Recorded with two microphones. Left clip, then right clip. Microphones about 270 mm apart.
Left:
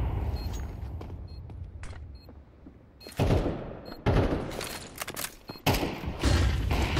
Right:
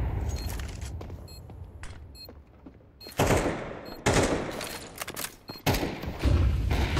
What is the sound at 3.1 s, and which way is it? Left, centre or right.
Gunshot, right.